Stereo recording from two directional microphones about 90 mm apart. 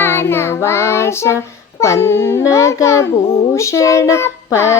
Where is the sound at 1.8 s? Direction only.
30° left (ahead or behind).